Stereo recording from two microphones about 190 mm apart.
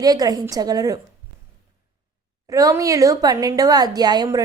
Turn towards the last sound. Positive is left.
turn(degrees=-20)  # may be behind; listen again after turning